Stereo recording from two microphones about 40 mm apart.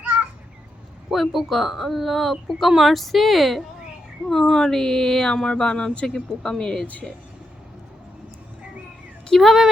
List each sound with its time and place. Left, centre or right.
1.1 s speech: centre
7.0 s speech: centre
9.3 s speech: centre